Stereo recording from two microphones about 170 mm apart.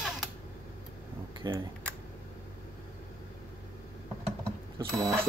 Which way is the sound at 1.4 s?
25° right (ahead or behind).